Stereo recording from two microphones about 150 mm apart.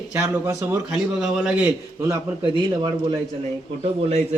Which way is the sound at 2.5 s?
30° right (ahead or behind).